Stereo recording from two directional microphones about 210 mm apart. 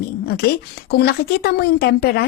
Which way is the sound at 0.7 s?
50° left (ahead or behind).